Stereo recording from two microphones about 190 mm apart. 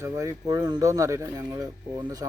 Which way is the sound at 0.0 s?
15° right (ahead or behind).